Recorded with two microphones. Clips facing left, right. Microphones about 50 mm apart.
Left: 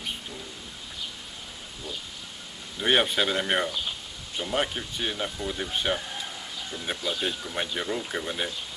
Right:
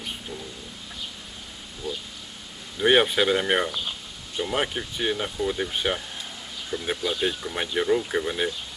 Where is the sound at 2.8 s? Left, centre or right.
Centre.